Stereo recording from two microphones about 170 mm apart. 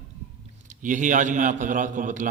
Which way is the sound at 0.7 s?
45° right (ahead or behind).